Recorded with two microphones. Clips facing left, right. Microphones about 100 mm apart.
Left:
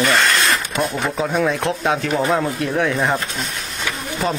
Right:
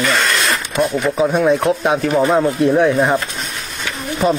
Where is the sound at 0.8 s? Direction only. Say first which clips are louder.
Right 5 dB; 10° right (ahead or behind).